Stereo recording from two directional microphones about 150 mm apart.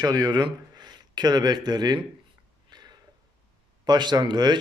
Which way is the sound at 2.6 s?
30° right (ahead or behind).